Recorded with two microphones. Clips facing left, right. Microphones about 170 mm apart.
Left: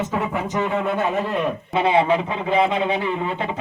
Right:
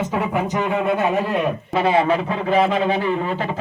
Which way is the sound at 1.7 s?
25° left (ahead or behind).